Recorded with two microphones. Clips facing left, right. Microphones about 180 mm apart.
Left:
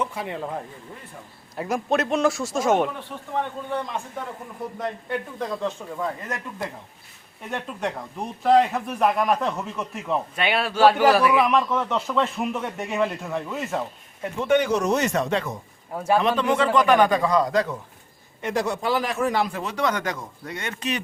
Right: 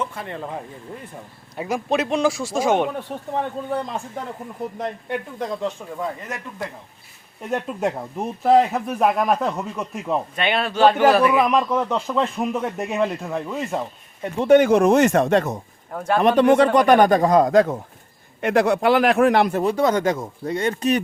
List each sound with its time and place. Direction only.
0.0 s speech: 10° left (ahead or behind)
3.1 s speech: 45° right (ahead or behind)
4.8 s speech: 20° right (ahead or behind)
7.5 s speech: 5° right (ahead or behind)
11.9 s speech: 10° right (ahead or behind)
12.4 s speech: centre (ahead or behind)
14.3 s speech: 35° right (ahead or behind)
14.6 s speech: 55° right (ahead or behind)
18.4 s speech: 65° right (ahead or behind)
19.5 s speech: 45° right (ahead or behind)
19.7 s speech: 30° right (ahead or behind)